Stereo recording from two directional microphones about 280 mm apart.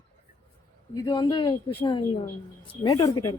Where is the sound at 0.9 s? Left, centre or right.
Centre.